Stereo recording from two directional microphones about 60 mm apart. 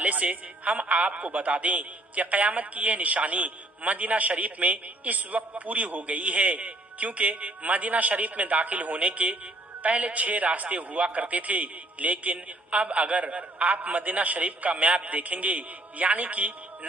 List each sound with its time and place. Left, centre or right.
0.0 s speech: right